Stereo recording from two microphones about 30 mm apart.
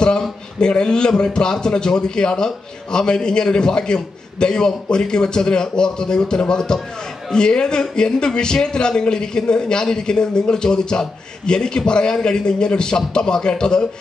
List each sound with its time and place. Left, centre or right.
0.6 s a man's voice: left